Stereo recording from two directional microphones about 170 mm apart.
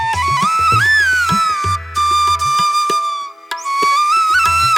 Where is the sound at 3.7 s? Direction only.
Centre (ahead or behind).